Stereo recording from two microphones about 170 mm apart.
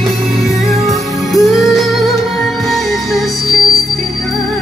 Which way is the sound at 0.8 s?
Centre (ahead or behind).